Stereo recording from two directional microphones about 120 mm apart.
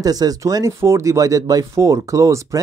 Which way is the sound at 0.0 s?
30° right (ahead or behind).